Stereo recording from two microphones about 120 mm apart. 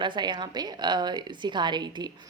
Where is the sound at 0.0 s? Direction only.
40° right (ahead or behind).